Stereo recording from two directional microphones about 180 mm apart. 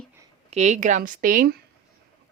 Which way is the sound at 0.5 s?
40° right (ahead or behind).